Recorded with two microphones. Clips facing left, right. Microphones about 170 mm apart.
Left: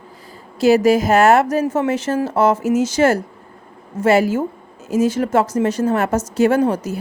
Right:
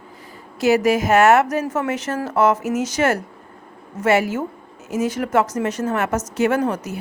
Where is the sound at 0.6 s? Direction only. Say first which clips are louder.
Left 4 dB; 30° left (ahead or behind).